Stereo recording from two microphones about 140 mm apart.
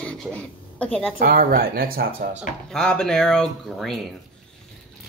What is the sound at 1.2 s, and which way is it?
Speech, 90° right.